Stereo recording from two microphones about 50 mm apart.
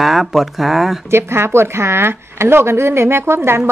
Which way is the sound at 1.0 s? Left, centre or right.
Right.